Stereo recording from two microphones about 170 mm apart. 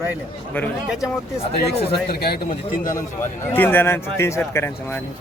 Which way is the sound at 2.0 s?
70° left (ahead or behind).